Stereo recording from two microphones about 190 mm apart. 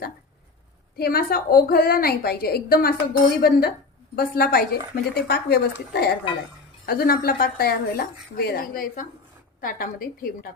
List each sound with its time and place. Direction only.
0.9 s a woman's voice: 55° left (ahead or behind)